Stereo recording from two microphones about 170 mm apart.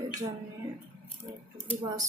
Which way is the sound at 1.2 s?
20° right (ahead or behind).